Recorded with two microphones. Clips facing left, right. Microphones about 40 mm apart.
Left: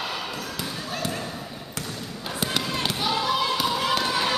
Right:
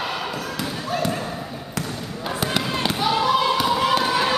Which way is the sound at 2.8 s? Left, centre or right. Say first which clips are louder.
Right 6 dB; centre.